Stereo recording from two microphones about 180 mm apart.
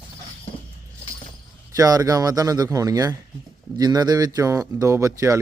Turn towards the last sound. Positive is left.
turn(degrees=-15)  # may be behind; listen again after turning